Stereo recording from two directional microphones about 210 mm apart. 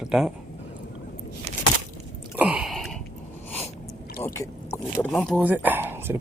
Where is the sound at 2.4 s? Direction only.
Centre (ahead or behind).